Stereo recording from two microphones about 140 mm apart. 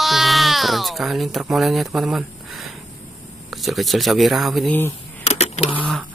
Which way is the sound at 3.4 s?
Centre (ahead or behind).